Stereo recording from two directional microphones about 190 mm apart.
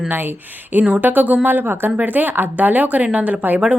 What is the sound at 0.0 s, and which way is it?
Speech, 10° right (ahead or behind).